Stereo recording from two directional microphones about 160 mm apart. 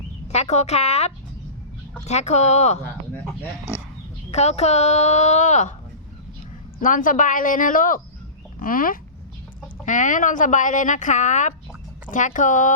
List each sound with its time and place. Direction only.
0.3 s a woman's voice: 45° left (ahead or behind)
4.3 s a woman's voice: 45° left (ahead or behind)
6.7 s a woman's voice: 55° left (ahead or behind)